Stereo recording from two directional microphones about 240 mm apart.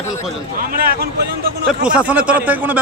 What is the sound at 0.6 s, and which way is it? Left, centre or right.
Speech, right.